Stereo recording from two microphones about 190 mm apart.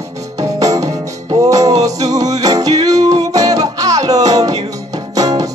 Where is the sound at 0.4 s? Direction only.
20° right (ahead or behind).